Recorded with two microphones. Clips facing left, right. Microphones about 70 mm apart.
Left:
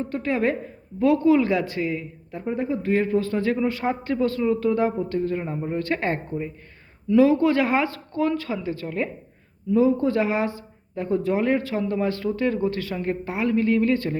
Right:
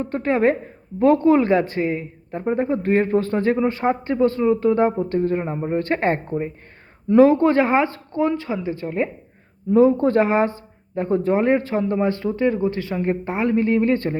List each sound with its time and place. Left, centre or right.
0.0 s a woman's voice: right
9.7 s a woman's voice: right